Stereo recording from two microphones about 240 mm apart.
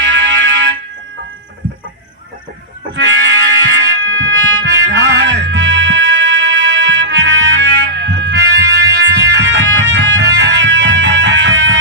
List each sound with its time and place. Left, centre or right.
0.0 s fire alarm: right
2.9 s music: right